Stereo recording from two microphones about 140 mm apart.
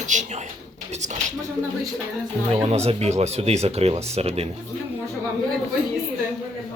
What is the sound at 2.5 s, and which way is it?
Speech, 45° right (ahead or behind).